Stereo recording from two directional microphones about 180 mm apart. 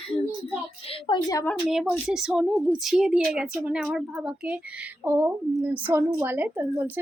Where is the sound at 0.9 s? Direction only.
25° left (ahead or behind).